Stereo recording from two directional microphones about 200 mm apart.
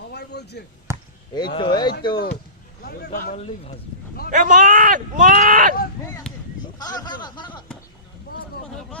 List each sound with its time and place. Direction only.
0.1 s chop: 55° left (ahead or behind)
0.9 s basketball bounce: 15° right (ahead or behind)
1.3 s speech: 20° left (ahead or behind)
3.1 s speech: 45° left (ahead or behind)
3.3 s speech: 30° left (ahead or behind)
4.3 s speech: 40° right (ahead or behind)
6.3 s a sound: 5° left (ahead or behind)
6.7 s speech: 20° left (ahead or behind)